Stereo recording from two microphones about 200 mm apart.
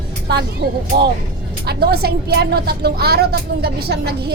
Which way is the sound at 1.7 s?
50° right (ahead or behind).